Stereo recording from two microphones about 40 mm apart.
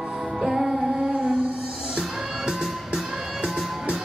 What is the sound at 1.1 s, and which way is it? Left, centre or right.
Music, right.